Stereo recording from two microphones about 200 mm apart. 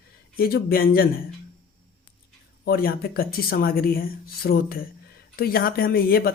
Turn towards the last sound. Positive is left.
turn(degrees=50)  # may be behind; listen again after turning